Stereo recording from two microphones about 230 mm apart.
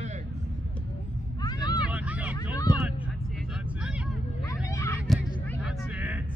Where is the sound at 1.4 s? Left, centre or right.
Centre.